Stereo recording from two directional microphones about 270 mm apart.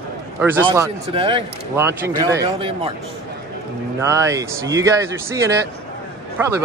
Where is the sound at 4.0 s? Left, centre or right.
Centre.